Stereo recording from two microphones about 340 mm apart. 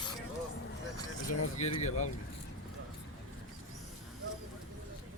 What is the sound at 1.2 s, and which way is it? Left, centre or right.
Speech, centre.